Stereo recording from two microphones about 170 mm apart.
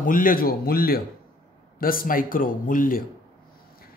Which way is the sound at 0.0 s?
55° left (ahead or behind).